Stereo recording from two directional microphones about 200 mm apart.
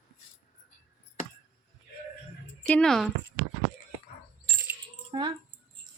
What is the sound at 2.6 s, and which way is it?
Speech, 5° left (ahead or behind).